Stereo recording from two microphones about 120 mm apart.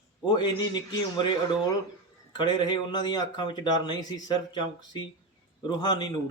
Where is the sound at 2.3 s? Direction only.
40° left (ahead or behind).